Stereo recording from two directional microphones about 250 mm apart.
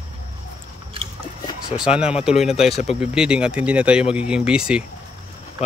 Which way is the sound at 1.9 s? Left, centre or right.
Left.